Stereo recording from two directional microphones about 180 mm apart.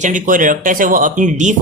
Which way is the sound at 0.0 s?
45° right (ahead or behind).